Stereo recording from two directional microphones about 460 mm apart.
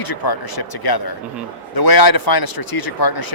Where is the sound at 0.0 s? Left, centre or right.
Left.